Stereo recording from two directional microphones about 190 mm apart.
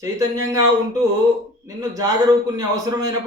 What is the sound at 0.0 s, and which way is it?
Speech, 15° right (ahead or behind).